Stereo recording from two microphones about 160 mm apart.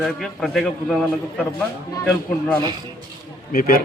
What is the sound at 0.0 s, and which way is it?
Speech, centre (ahead or behind).